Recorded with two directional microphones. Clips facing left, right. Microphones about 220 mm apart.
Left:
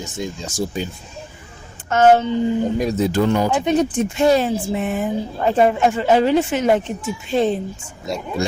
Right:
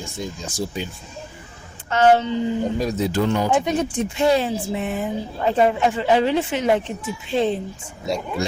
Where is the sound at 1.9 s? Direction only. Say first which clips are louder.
Left 3 dB; 45° left (ahead or behind).